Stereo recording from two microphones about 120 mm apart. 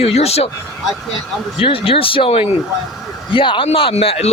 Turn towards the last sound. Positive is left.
turn(degrees=55)  # may be behind; listen again after turning